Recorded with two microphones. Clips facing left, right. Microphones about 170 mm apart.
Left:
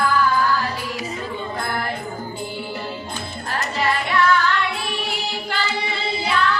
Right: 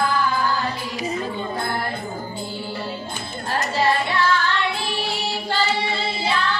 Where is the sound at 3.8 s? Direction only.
30° right (ahead or behind).